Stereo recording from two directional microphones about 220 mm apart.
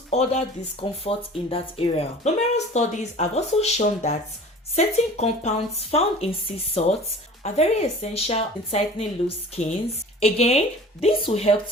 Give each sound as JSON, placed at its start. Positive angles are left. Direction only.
{"t": 0.1, "sound": "speech", "side_deg": 30}